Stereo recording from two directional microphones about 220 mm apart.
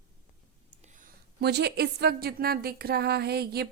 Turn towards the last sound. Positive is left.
turn(degrees=-45)  # may be behind; listen again after turning